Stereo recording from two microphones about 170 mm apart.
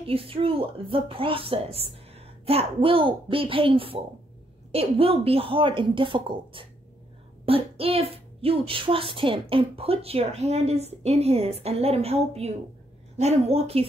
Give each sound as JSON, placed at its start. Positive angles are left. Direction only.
{"t": 0.0, "sound": "speech", "side_deg": -35}